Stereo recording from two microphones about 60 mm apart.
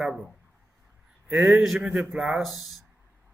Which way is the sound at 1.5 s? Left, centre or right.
Centre.